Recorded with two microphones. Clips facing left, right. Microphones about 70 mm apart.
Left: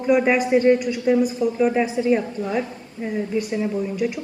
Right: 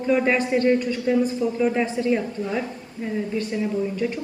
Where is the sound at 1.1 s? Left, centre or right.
Centre.